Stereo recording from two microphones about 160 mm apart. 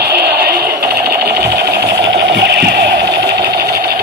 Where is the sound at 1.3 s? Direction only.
90° right.